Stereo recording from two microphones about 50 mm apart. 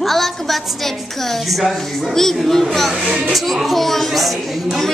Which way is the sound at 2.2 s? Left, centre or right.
Centre.